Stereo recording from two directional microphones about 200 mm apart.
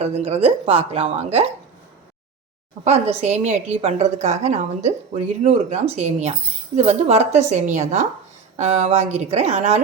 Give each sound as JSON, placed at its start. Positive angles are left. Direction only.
{"t": 0.0, "sound": "a woman's voice", "side_deg": -30}
{"t": 2.8, "sound": "a woman's voice", "side_deg": -35}